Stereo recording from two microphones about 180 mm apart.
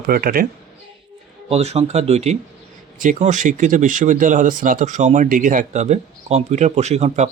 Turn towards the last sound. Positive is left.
turn(degrees=-40)  # may be behind; listen again after turning